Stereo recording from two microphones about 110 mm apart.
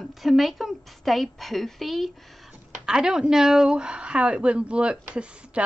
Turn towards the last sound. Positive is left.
turn(degrees=-10)  # may be behind; listen again after turning